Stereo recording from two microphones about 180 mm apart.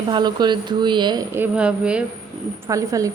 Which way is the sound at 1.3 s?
5° right (ahead or behind).